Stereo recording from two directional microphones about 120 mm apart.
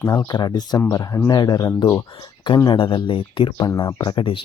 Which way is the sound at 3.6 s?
30° left (ahead or behind).